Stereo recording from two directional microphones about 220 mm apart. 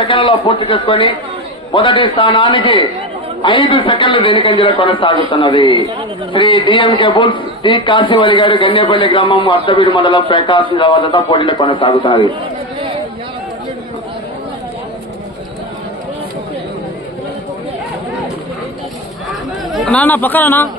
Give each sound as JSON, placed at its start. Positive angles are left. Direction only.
{"t": 0.0, "sound": "a man's voice", "side_deg": 25}
{"t": 19.7, "sound": "speech", "side_deg": 0}